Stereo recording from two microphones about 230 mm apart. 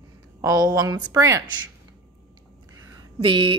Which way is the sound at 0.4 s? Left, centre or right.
Centre.